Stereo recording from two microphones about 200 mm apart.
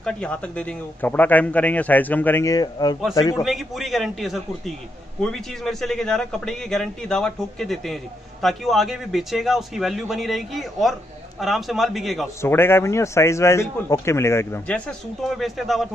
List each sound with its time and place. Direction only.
0.0 s a man's voice: 5° left (ahead or behind)
3.4 s a man's voice: centre (ahead or behind)
12.4 s a man's voice: 10° left (ahead or behind)